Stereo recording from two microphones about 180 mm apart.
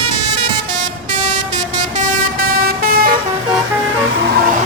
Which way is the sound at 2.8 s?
55° right (ahead or behind).